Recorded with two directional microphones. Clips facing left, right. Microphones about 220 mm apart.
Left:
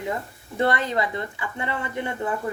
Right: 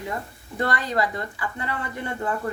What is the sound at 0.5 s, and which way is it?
A woman's voice, 25° left (ahead or behind).